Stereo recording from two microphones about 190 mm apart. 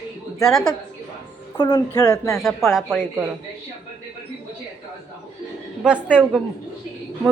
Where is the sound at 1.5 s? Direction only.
20° left (ahead or behind).